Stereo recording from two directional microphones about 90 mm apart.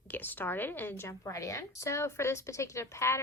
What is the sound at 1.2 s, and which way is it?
A woman's voice, 35° left (ahead or behind).